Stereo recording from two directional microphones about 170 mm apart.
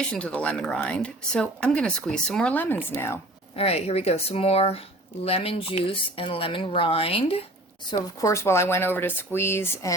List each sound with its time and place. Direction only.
0.1 s speech: 5° left (ahead or behind)
3.5 s speech: 35° left (ahead or behind)
7.9 s speech: 20° left (ahead or behind)